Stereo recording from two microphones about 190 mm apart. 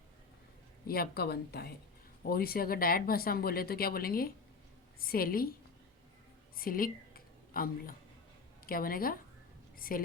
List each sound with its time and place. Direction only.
0.9 s speech: 55° left (ahead or behind)
6.6 s a woman's voice: 50° left (ahead or behind)